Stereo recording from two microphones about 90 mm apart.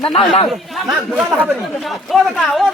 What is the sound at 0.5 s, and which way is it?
Speech, 5° right (ahead or behind).